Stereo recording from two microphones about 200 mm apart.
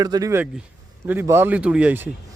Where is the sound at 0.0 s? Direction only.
20° right (ahead or behind).